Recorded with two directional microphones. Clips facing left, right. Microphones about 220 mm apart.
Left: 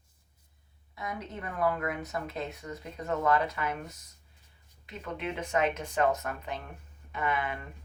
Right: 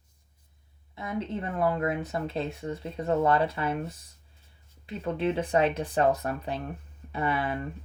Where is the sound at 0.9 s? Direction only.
25° right (ahead or behind).